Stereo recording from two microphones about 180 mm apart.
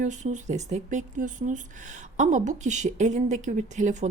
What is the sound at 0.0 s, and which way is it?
A woman's voice, 40° right (ahead or behind).